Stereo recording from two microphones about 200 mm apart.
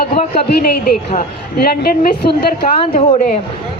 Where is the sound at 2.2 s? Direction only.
25° left (ahead or behind).